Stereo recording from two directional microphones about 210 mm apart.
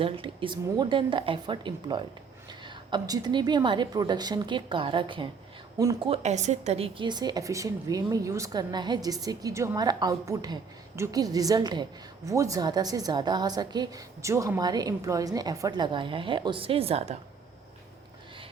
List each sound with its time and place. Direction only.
0.0 s a woman's voice: 25° right (ahead or behind)
6.1 s a woman's voice: 35° right (ahead or behind)